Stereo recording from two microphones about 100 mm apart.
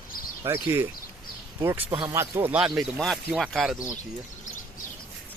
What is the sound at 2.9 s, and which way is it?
Speech, centre (ahead or behind).